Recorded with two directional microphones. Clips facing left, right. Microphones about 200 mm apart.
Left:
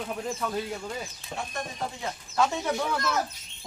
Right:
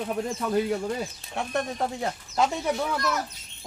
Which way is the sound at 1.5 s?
65° right (ahead or behind).